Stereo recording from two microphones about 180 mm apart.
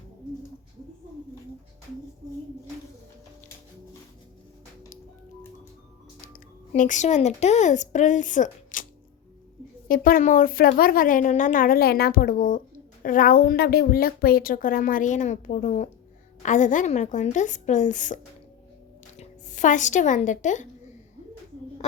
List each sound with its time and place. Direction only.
6.2 s speech: 50° left (ahead or behind)
9.9 s a woman's voice: 50° left (ahead or behind)
19.2 s speech: 45° left (ahead or behind)